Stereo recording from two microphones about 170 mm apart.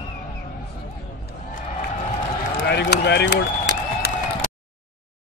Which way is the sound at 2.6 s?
75° left (ahead or behind).